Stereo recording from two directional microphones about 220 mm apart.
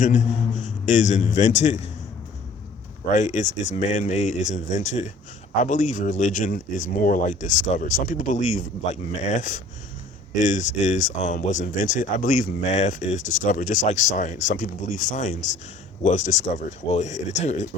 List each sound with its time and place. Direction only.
0.0 s a man's voice: 35° left (ahead or behind)
3.1 s speech: 35° left (ahead or behind)